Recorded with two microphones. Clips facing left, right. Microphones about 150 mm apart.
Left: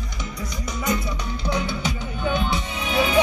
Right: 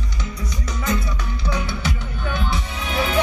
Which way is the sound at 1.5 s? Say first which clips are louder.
Left 1 dB; 20° left (ahead or behind).